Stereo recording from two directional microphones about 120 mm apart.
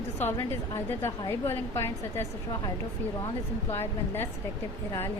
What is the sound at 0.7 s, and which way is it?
A woman's voice, 25° left (ahead or behind).